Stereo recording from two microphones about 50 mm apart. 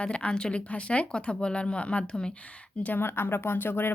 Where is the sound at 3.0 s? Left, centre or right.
Left.